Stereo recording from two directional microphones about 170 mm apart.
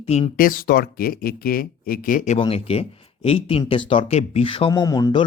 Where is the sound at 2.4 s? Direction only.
35° left (ahead or behind).